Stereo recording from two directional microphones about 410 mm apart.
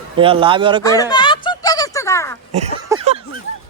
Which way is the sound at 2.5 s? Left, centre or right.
Centre.